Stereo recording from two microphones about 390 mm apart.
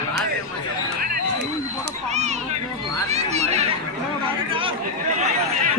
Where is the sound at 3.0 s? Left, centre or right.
Centre.